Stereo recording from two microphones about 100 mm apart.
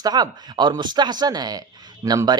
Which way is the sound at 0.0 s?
45° right (ahead or behind).